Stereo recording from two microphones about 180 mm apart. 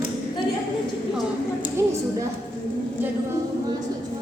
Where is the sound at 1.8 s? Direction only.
15° right (ahead or behind).